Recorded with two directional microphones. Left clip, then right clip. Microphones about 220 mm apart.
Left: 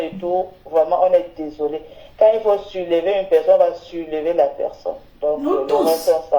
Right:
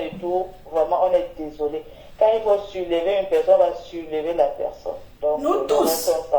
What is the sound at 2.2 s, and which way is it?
Speech, 40° left (ahead or behind).